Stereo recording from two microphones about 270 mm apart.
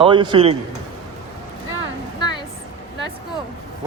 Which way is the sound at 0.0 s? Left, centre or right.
Centre.